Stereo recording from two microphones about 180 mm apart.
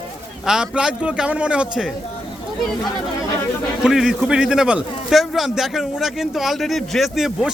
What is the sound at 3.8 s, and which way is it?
A man's voice, centre (ahead or behind).